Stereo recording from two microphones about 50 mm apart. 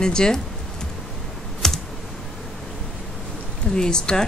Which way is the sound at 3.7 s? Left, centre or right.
Centre.